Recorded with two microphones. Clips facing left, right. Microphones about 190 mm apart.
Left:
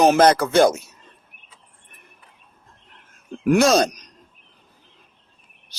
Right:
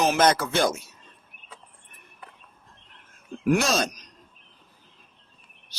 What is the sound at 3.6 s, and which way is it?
Speech, 40° left (ahead or behind).